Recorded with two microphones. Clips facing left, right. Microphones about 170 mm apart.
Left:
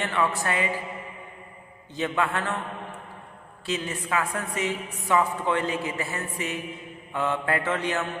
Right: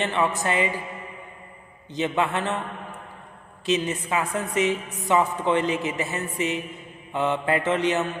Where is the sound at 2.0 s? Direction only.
20° right (ahead or behind).